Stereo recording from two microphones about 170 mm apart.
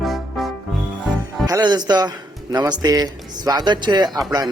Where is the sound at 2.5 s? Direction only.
20° right (ahead or behind).